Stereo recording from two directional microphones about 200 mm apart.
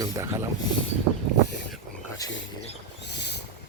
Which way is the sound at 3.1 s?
60° left (ahead or behind).